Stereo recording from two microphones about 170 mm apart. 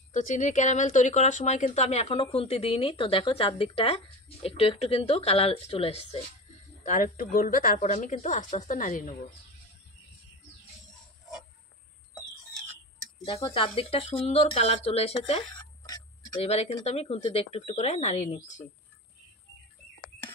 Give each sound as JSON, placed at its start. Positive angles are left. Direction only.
{"t": 0.1, "sound": "speech", "side_deg": 45}
{"t": 6.8, "sound": "a woman's voice", "side_deg": 50}
{"t": 13.5, "sound": "speech", "side_deg": 35}
{"t": 15.8, "sound": "tick-tock", "side_deg": 20}
{"t": 16.3, "sound": "speech", "side_deg": 35}